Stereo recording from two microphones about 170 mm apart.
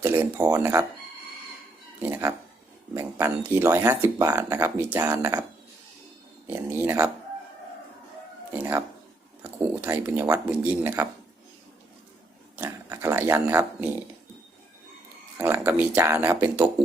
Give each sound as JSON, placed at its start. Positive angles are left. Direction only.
{"t": 0.0, "sound": "speech", "side_deg": -15}
{"t": 2.0, "sound": "speech", "side_deg": -15}
{"t": 6.5, "sound": "speech", "side_deg": -15}
{"t": 8.5, "sound": "speech", "side_deg": -10}
{"t": 12.5, "sound": "speech", "side_deg": -15}
{"t": 15.4, "sound": "speech", "side_deg": -15}